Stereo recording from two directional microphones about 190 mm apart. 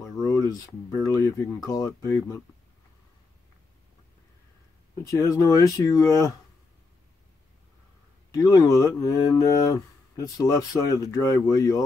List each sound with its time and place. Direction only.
0.0 s a sound: 15° left (ahead or behind)
1.0 s speech: 15° left (ahead or behind)
5.0 s speech: 15° left (ahead or behind)
8.3 s speech: 20° left (ahead or behind)